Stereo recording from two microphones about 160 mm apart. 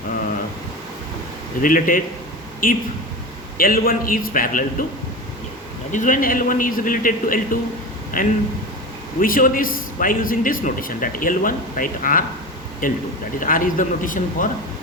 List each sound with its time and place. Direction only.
1.6 s a man's voice: 60° left (ahead or behind)
5.9 s a man's voice: 55° left (ahead or behind)